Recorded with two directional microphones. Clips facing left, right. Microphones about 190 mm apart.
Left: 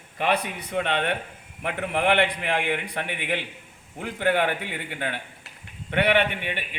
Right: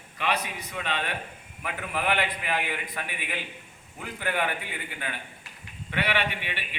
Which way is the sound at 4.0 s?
60° left (ahead or behind).